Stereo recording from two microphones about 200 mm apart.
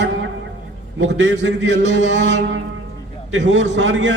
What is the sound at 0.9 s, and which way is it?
A man's voice, 65° right (ahead or behind).